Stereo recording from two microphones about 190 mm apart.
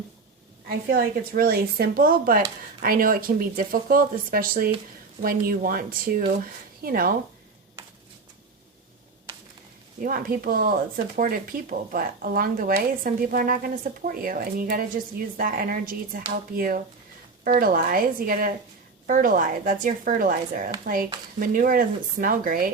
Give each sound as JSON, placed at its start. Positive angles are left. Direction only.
{"t": 0.7, "sound": "speech", "side_deg": -50}
{"t": 10.0, "sound": "speech", "side_deg": -45}